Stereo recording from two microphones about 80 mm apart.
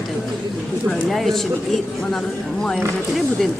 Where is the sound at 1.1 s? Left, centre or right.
Centre.